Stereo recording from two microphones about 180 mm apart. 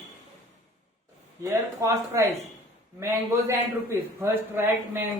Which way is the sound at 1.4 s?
15° right (ahead or behind).